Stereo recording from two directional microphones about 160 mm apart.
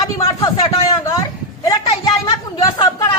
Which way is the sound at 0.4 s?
30° left (ahead or behind).